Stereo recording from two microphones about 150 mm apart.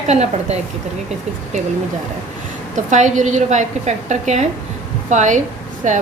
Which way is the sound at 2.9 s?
55° right (ahead or behind).